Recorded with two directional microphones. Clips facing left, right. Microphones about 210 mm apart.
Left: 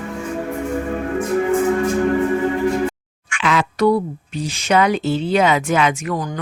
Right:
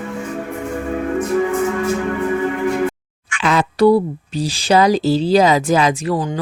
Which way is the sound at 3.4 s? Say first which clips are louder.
Right 3 dB; 35° right (ahead or behind).